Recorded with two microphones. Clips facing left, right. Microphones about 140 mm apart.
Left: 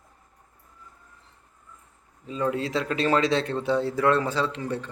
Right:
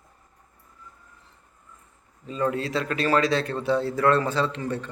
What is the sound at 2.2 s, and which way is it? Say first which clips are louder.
A man's voice: right 1 dB; 15° left (ahead or behind).